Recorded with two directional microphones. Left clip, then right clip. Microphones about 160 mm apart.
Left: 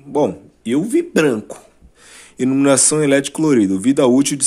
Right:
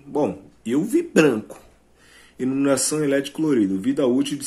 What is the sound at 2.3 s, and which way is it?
Speech, 55° left (ahead or behind).